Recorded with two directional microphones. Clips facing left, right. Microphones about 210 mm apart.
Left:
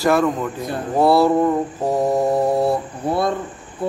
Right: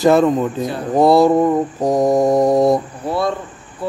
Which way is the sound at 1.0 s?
15° right (ahead or behind).